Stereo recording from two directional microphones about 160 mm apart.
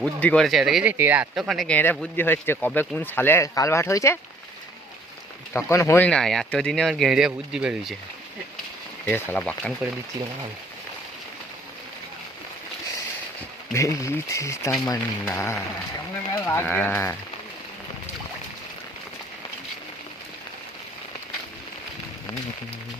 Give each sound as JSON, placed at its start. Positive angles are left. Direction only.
{"t": 0.0, "sound": "speech", "side_deg": 5}
{"t": 5.5, "sound": "speech", "side_deg": 15}
{"t": 6.1, "sound": "speech", "side_deg": 5}
{"t": 9.0, "sound": "speech", "side_deg": 10}
{"t": 13.7, "sound": "speech", "side_deg": 20}